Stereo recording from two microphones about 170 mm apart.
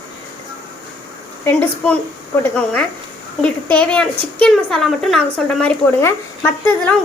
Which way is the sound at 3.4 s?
10° left (ahead or behind).